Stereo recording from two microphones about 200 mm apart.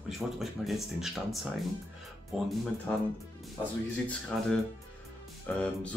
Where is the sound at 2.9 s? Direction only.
10° left (ahead or behind).